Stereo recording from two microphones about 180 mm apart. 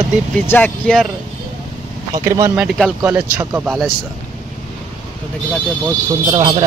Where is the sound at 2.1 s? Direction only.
15° right (ahead or behind).